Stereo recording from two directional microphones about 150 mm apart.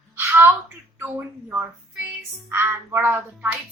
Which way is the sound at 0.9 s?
15° right (ahead or behind).